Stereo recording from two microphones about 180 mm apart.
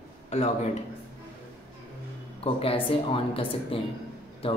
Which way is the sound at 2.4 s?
30° left (ahead or behind).